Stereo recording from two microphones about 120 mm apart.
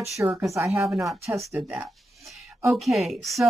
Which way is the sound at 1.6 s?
5° right (ahead or behind).